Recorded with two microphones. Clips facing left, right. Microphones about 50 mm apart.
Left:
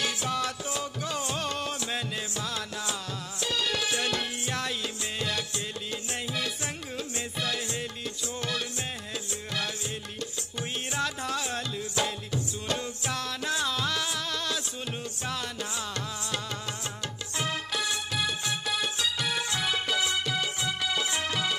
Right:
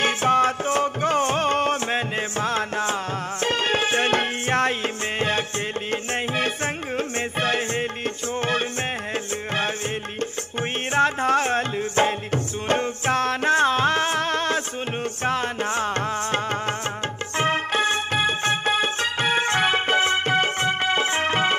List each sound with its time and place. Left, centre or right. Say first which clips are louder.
0.0 s music: right 11 dB; right
10.9 s music: right 13 dB; right